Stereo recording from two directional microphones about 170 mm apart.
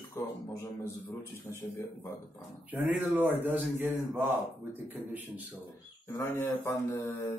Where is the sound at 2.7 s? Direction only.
5° right (ahead or behind).